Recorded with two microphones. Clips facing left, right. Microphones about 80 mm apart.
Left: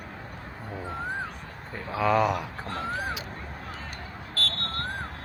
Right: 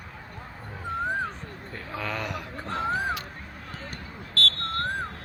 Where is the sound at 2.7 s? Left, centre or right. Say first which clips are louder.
Right 5 dB; right.